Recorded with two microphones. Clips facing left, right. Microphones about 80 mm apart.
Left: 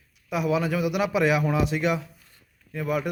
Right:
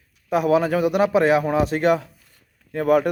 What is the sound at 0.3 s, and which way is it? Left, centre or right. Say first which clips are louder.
Speech: right 6 dB; right.